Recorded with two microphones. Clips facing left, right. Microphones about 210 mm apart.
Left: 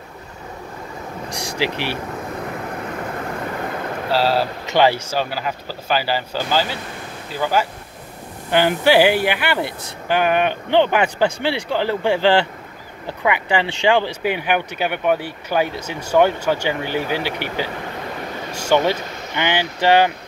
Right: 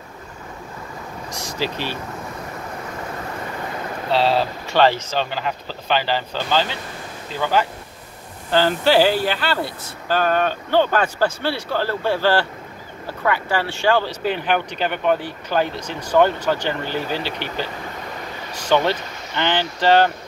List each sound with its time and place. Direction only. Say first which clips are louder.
1.3 s speech: left 3 dB; 15° left (ahead or behind)
4.1 s speech: even; 5° left (ahead or behind)